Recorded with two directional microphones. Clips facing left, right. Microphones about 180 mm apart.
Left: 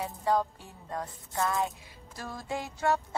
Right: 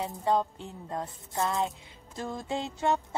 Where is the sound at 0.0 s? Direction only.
20° right (ahead or behind).